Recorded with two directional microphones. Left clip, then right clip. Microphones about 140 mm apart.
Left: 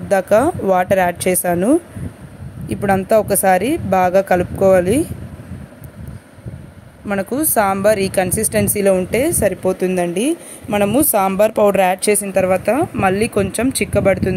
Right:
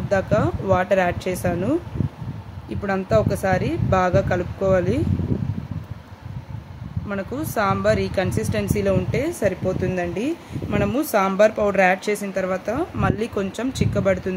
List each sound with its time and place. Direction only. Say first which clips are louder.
0.1 s speech: left 7 dB; 55° left (ahead or behind)
7.1 s speech: left 8 dB; 45° left (ahead or behind)
13.2 s speech: left 8 dB; 40° left (ahead or behind)